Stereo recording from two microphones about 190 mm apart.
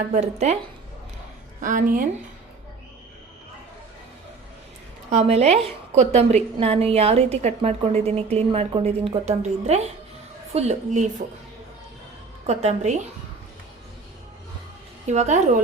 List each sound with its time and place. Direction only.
0.1 s a woman's voice: 35° right (ahead or behind)
1.6 s speech: 45° right (ahead or behind)
5.1 s a woman's voice: 35° right (ahead or behind)
12.5 s a woman's voice: 35° right (ahead or behind)
15.0 s a woman's voice: 35° right (ahead or behind)